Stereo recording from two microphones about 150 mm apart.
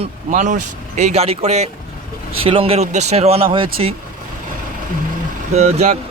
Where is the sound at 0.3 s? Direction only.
60° right (ahead or behind); by 3.9 s 35° right (ahead or behind).